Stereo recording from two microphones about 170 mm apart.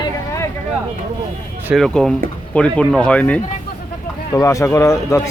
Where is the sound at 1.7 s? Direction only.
Centre (ahead or behind).